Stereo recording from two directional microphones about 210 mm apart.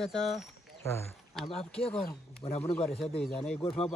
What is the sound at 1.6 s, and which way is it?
Speech, 25° left (ahead or behind).